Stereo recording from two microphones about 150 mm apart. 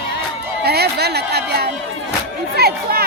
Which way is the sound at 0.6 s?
90° right.